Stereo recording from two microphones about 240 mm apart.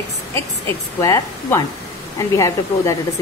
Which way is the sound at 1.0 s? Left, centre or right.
Centre.